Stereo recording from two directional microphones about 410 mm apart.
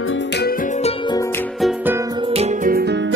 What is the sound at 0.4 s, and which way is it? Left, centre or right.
Music, centre.